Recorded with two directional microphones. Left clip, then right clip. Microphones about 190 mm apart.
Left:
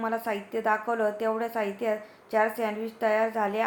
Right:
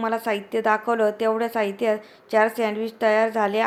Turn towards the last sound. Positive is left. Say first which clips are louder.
# right 5 dB
turn(degrees=-35)  # may be behind; listen again after turning